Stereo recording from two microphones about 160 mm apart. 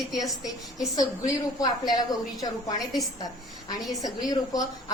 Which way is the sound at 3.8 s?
25° left (ahead or behind).